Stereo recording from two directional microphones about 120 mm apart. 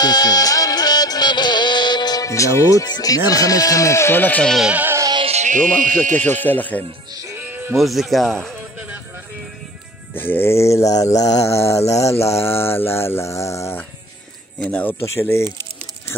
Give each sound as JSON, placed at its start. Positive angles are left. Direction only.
{"t": 0.0, "sound": "music", "side_deg": 35}
{"t": 3.3, "sound": "mantra", "side_deg": 30}
{"t": 4.6, "sound": "music", "side_deg": -10}
{"t": 5.3, "sound": "speech", "side_deg": -85}
{"t": 6.4, "sound": "speech", "side_deg": 15}
{"t": 7.3, "sound": "music", "side_deg": -15}
{"t": 7.7, "sound": "speech", "side_deg": 0}
{"t": 8.7, "sound": "music", "side_deg": -10}
{"t": 10.1, "sound": "mantra", "side_deg": 15}
{"t": 14.6, "sound": "speech", "side_deg": 10}
{"t": 15.0, "sound": "mantra", "side_deg": 20}